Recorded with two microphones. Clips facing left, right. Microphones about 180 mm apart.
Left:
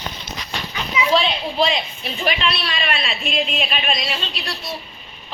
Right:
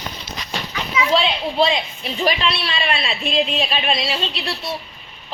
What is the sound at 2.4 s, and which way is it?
A woman's voice, 25° right (ahead or behind).